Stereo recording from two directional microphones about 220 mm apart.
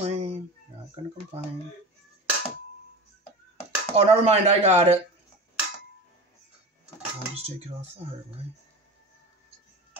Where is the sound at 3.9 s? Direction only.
25° right (ahead or behind).